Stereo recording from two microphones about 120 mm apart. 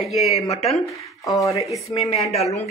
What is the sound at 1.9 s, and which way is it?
Speech, 55° left (ahead or behind).